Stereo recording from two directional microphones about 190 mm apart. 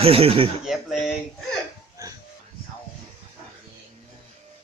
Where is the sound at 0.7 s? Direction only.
Centre (ahead or behind).